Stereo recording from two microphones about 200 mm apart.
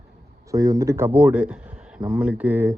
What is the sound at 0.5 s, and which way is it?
Speech, 15° right (ahead or behind).